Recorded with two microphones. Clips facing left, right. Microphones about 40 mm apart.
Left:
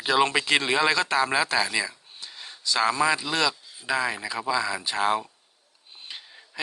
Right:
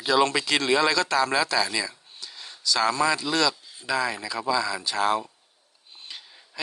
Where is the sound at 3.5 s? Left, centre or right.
Centre.